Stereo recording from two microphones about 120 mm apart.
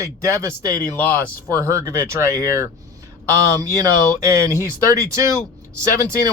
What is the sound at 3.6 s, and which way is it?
Speech, 30° right (ahead or behind).